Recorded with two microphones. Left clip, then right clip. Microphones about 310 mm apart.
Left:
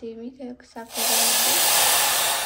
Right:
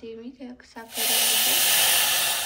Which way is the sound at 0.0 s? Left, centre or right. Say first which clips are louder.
Left 3 dB; centre.